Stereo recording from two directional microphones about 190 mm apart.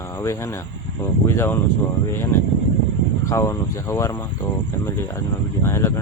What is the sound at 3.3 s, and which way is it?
Speech, 15° left (ahead or behind).